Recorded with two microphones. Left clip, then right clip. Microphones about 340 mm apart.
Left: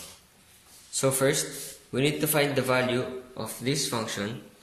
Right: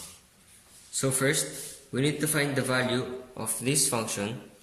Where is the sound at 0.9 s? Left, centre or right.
Centre.